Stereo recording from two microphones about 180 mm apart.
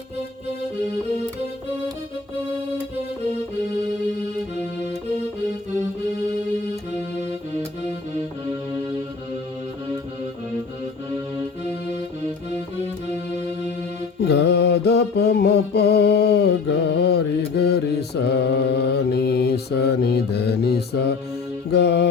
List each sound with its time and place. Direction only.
13.1 s music: 40° right (ahead or behind)
14.2 s music: 70° left (ahead or behind)